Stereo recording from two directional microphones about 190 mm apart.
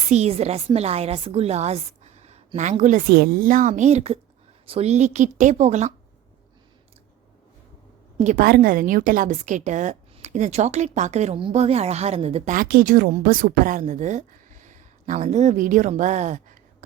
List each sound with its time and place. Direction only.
0.1 s a woman's voice: 35° right (ahead or behind)
3.1 s a woman's voice: 55° right (ahead or behind); by 5.9 s 35° right (ahead or behind)
8.4 s a woman's voice: 55° right (ahead or behind); by 12.5 s 30° right (ahead or behind)
12.5 s a woman's voice: 50° right (ahead or behind)